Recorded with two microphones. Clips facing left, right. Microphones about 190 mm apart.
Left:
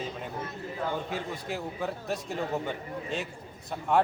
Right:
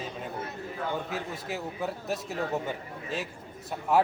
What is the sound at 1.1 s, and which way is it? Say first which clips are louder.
A man's voice: left 1 dB; centre (ahead or behind).